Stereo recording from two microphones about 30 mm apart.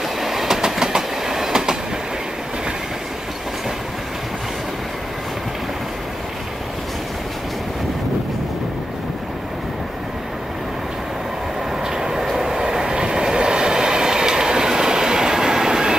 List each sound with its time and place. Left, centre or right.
0.2 s train: centre
11.8 s vehicle: right
12.5 s train: right